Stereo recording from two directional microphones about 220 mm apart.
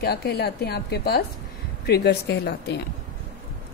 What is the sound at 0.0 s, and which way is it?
Speech, 45° left (ahead or behind).